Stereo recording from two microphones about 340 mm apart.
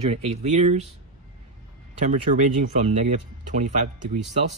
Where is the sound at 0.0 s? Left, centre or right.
Centre.